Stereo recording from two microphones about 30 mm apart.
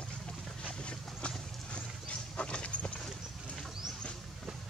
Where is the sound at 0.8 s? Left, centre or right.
Left.